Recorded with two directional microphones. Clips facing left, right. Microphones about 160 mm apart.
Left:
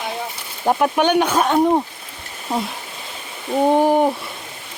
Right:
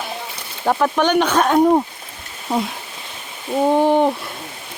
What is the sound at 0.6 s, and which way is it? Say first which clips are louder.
Speech: even; 15° left (ahead or behind).